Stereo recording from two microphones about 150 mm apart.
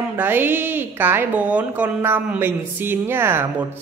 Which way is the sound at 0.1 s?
15° right (ahead or behind).